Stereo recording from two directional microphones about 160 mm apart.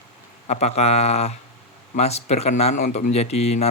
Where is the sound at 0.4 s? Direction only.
45° left (ahead or behind).